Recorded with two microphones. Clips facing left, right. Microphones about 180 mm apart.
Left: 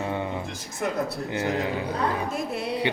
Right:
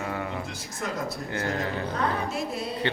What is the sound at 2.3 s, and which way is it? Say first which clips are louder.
Music: left 2 dB; 55° left (ahead or behind).